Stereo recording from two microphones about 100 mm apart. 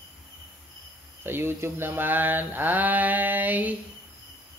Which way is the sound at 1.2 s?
25° right (ahead or behind).